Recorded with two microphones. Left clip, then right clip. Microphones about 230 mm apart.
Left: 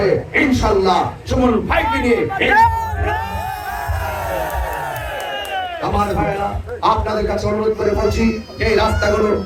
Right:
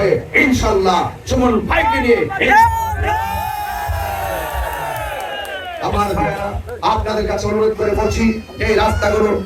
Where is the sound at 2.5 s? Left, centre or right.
Right.